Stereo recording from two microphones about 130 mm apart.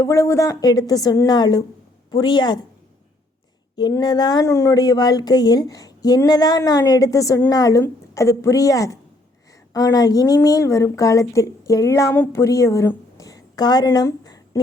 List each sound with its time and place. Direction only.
0.0 s a woman's voice: 20° left (ahead or behind)
3.8 s speech: 30° left (ahead or behind)
4.4 s a woman's voice: 20° left (ahead or behind)